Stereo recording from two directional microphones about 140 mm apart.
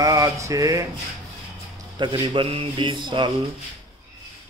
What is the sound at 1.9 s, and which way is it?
A man's voice, 35° right (ahead or behind).